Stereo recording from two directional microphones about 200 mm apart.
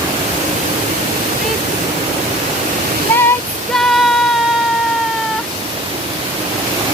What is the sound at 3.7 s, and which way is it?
Child singing, centre (ahead or behind).